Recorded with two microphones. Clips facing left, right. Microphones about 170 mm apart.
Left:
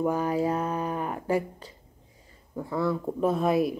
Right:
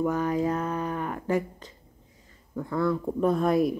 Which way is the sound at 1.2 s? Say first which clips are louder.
Right 1 dB; 10° left (ahead or behind).